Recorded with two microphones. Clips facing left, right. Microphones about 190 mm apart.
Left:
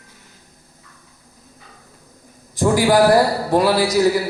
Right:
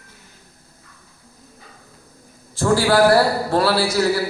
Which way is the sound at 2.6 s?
15° left (ahead or behind).